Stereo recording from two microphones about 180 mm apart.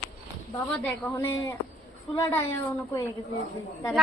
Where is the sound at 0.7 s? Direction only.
10° left (ahead or behind).